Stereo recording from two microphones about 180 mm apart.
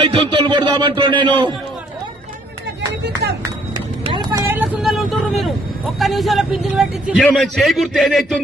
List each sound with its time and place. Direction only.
0.0 s speech: 30° right (ahead or behind)
3.8 s vehicle: 25° right (ahead or behind); by 5.5 s centre (ahead or behind)
6.0 s speech: centre (ahead or behind)